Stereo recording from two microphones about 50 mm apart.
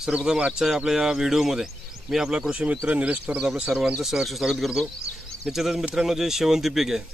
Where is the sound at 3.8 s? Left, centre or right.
Centre.